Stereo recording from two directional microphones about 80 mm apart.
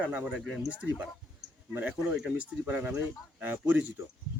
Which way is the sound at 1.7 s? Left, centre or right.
Right.